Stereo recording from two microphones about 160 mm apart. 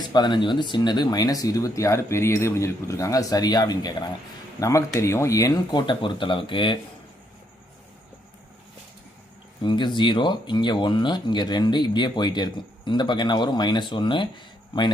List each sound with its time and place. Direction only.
0.1 s speech: 30° left (ahead or behind)
4.9 s speech: 15° left (ahead or behind)
9.6 s speech: 30° left (ahead or behind)